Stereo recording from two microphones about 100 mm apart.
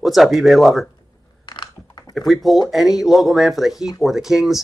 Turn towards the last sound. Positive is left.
turn(degrees=-5)  # may be behind; listen again after turning